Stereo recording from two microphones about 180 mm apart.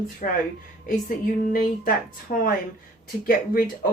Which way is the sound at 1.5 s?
50° left (ahead or behind).